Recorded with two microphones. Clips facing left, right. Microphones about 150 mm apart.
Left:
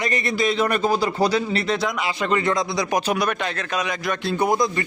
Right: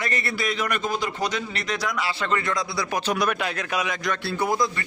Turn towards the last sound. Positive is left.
turn(degrees=20)  # may be behind; listen again after turning